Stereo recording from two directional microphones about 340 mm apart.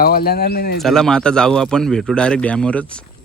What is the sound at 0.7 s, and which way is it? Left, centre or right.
Speech, centre.